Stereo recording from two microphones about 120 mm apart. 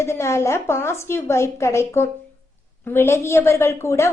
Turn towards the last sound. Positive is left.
turn(degrees=20)  # may be behind; listen again after turning